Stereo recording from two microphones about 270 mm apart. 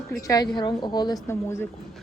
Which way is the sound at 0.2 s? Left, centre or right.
Centre.